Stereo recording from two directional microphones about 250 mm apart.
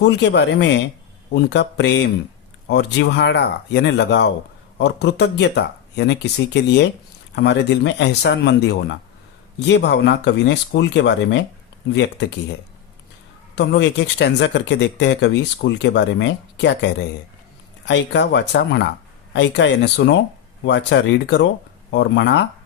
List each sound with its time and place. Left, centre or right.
0.0 s speech: left
13.6 s speech: left